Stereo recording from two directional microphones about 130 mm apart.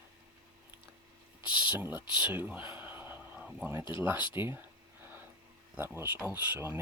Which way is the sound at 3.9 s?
15° right (ahead or behind).